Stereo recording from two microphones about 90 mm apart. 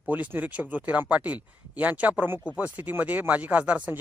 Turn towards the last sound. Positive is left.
turn(degrees=-15)  # may be behind; listen again after turning